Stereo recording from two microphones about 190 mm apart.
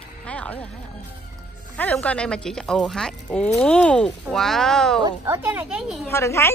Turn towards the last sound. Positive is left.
turn(degrees=15)  # may be behind; listen again after turning